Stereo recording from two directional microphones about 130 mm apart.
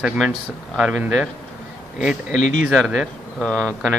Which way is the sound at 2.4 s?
80° left.